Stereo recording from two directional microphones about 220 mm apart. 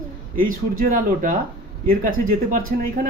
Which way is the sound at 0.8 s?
40° right (ahead or behind).